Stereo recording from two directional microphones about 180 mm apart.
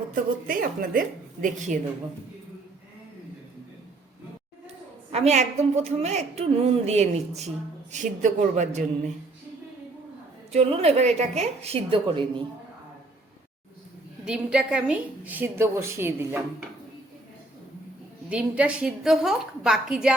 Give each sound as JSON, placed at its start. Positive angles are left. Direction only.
{"t": 0.4, "sound": "a woman's voice", "side_deg": -50}
{"t": 5.1, "sound": "a woman's voice", "side_deg": -40}
{"t": 10.5, "sound": "a woman's voice", "side_deg": -35}
{"t": 14.3, "sound": "a woman's voice", "side_deg": -5}
{"t": 18.3, "sound": "a woman's voice", "side_deg": -5}